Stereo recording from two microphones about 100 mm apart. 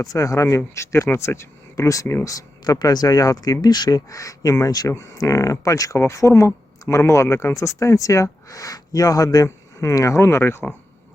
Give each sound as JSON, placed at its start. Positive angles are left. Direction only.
{"t": 0.0, "sound": "speech", "side_deg": 35}